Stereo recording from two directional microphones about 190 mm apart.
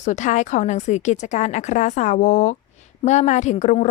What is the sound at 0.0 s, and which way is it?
A woman's voice, 40° left (ahead or behind).